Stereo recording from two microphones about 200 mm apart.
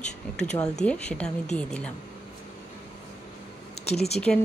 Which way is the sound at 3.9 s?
30° left (ahead or behind).